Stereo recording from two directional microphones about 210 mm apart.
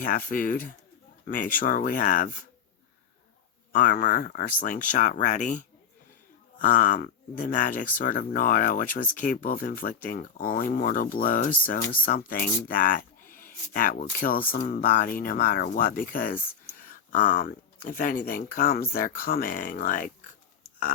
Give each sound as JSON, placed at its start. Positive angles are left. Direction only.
{"t": 0.0, "sound": "speech", "side_deg": 40}
{"t": 3.7, "sound": "speech", "side_deg": 40}